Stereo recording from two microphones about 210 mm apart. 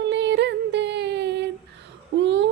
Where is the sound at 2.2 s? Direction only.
55° right (ahead or behind).